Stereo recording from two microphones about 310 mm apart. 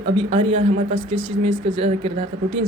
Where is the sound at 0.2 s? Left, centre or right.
Centre.